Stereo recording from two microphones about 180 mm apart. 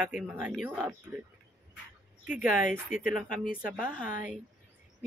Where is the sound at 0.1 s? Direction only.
10° right (ahead or behind).